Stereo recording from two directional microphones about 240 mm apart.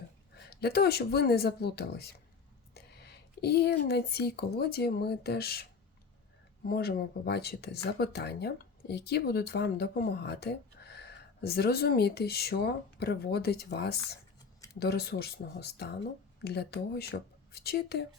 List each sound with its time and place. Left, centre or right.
0.3 s speech: left
6.7 s speech: left